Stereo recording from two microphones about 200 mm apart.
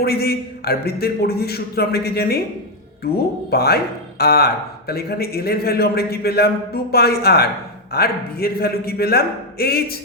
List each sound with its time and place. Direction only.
0.0 s a man's voice: 50° left (ahead or behind)
3.5 s a man's voice: 50° left (ahead or behind)